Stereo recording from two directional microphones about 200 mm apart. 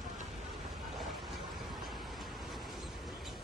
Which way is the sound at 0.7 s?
Centre (ahead or behind).